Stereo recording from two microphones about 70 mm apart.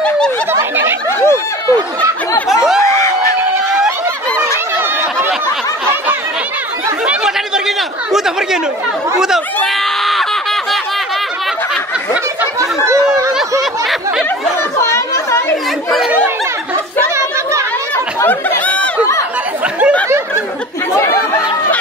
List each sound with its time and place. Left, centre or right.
0.5 s a sound: right
1.2 s a sound: left
2.5 s snicker: centre
7.1 s chatter: centre
12.5 s chatter: right
13.6 s snicker: centre
14.8 s chatter: left
18.2 s a sound: left
21.0 s chatter: left